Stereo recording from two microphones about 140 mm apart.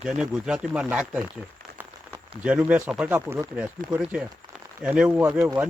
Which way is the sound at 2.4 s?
10° right (ahead or behind).